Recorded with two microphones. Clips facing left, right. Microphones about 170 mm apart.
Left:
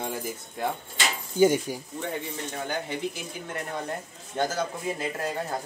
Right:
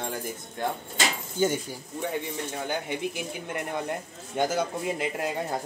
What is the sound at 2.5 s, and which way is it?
Speech, 10° right (ahead or behind).